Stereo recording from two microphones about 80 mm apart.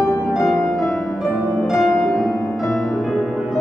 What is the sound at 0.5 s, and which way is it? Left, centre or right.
Music, left.